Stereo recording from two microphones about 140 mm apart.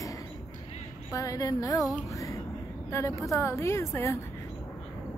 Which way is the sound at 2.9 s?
20° left (ahead or behind).